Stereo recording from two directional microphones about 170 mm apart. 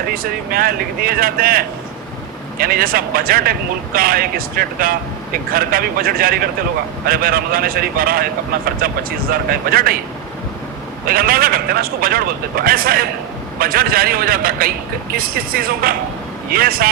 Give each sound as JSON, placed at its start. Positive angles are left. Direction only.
{"t": 0.1, "sound": "speech", "side_deg": -60}
{"t": 11.0, "sound": "speech", "side_deg": -60}